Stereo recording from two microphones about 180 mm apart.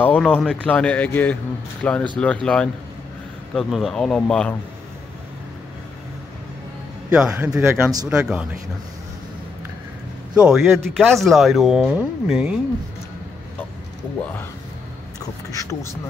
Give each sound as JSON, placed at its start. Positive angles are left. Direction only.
{"t": 0.0, "sound": "a man's voice", "side_deg": 10}
{"t": 7.1, "sound": "speech", "side_deg": -5}
{"t": 8.1, "sound": "speech", "side_deg": -5}
{"t": 10.3, "sound": "speech", "side_deg": -5}
{"t": 15.1, "sound": "a sound", "side_deg": 20}